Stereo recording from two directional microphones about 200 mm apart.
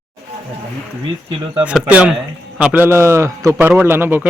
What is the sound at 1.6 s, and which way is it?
Speech, 5° right (ahead or behind).